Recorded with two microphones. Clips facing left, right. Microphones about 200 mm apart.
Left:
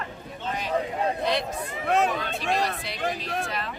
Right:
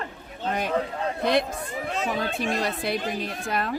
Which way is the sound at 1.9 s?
60° left (ahead or behind).